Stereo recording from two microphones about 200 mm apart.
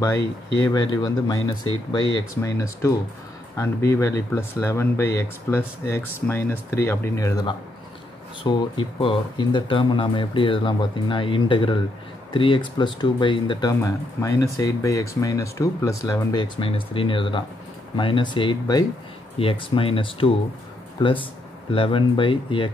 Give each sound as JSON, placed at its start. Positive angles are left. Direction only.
{"t": 0.6, "sound": "speech", "side_deg": 20}